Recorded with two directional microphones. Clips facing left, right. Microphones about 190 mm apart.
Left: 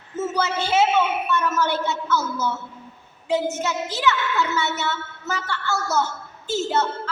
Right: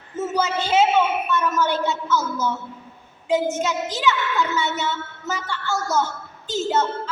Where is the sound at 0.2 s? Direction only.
15° right (ahead or behind).